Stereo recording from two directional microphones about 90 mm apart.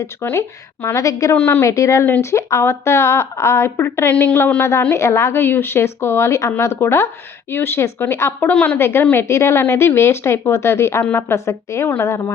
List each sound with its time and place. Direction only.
0.0 s a woman's voice: 30° left (ahead or behind)
1.4 s a woman's voice: 20° left (ahead or behind)
1.6 s a woman's voice: 35° left (ahead or behind); by 8.8 s 15° left (ahead or behind)
8.8 s a woman's voice: 25° left (ahead or behind)